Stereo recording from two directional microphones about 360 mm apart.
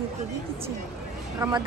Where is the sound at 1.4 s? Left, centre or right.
Centre.